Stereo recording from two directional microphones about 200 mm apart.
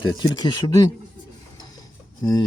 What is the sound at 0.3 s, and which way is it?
Speech, 20° left (ahead or behind).